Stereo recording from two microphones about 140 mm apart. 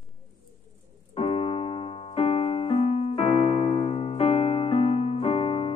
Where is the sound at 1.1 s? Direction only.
45° left (ahead or behind).